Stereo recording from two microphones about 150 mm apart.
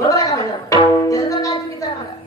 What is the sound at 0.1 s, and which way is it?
Tabla, 20° left (ahead or behind).